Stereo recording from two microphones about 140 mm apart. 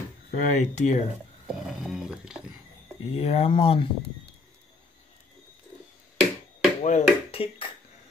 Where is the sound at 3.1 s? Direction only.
45° left (ahead or behind).